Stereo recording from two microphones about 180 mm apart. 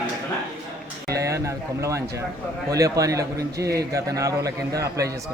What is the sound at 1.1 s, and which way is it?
A man's voice, 20° right (ahead or behind).